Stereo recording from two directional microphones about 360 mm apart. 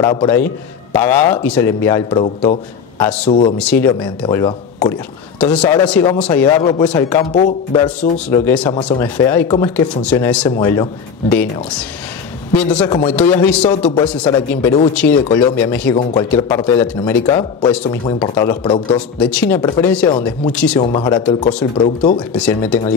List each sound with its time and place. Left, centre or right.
0.0 s a man's voice: centre
12.5 s a man's voice: centre